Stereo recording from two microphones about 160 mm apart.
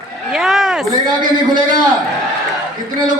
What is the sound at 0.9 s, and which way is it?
Speech, 25° right (ahead or behind).